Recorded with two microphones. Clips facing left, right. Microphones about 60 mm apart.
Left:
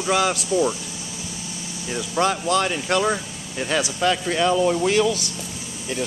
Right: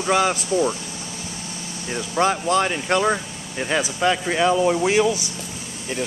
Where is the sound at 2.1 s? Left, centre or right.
Right.